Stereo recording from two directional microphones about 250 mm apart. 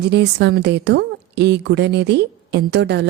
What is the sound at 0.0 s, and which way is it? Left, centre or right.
A woman's voice, right.